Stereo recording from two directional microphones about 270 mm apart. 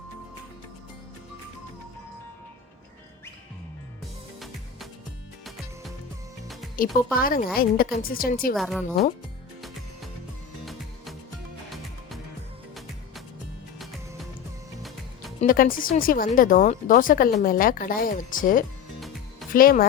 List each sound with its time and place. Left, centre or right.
6.7 s speech: left
8.5 s speech: centre
9.6 s music: centre
15.4 s speech: left
18.9 s music: centre
19.5 s speech: left